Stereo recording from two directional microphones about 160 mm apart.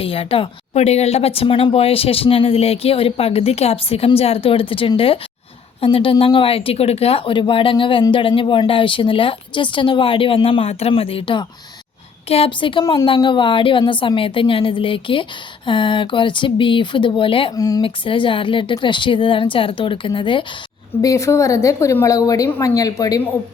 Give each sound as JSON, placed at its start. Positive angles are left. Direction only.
{"t": 0.0, "sound": "a woman's voice", "side_deg": 35}
{"t": 21.0, "sound": "a woman's voice", "side_deg": 20}